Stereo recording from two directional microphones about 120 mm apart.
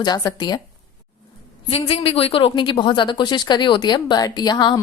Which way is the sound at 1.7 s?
55° left (ahead or behind).